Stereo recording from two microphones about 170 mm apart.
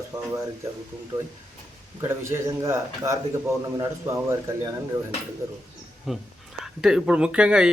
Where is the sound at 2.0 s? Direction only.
15° right (ahead or behind).